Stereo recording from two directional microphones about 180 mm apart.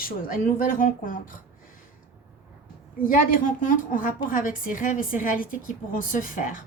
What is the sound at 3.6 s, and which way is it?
Speech, 50° left (ahead or behind).